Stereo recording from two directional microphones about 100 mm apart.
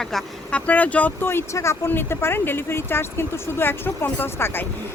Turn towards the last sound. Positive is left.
turn(degrees=20)  # may be behind; listen again after turning